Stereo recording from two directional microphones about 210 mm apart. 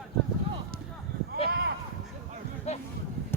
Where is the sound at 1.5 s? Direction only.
50° right (ahead or behind).